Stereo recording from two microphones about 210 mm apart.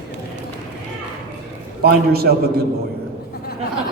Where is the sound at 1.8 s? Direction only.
50° right (ahead or behind).